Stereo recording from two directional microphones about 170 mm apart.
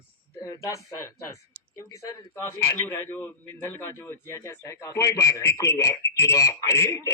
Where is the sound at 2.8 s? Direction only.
15° left (ahead or behind).